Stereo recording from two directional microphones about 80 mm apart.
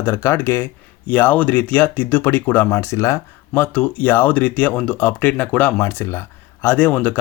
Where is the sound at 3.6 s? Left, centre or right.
Centre.